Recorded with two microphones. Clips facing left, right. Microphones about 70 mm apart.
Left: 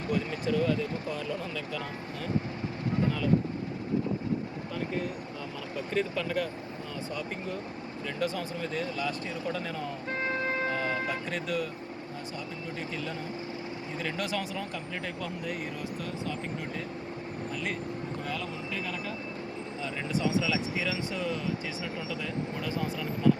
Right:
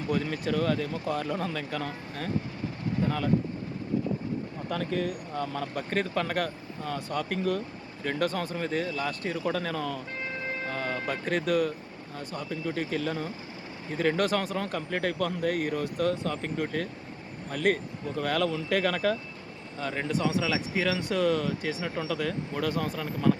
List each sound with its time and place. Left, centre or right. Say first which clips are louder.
0.1 s speech: right 1 dB; right
4.7 s speech: right 4 dB; right
5.5 s speech: left 2 dB; right
8.0 s speech: right 4 dB; right
10.5 s siren: left 2 dB; left
11.0 s speech: right 4 dB; right
13.9 s speech: right 8 dB; right
18.2 s speech: right 8 dB; right
19.8 s speech: right 3 dB; right
22.0 s speech: right 4 dB; right